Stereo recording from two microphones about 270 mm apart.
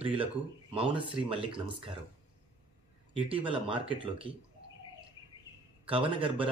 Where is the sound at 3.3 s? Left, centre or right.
Centre.